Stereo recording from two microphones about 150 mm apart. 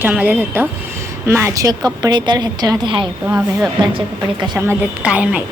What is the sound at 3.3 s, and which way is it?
Speech, 10° right (ahead or behind).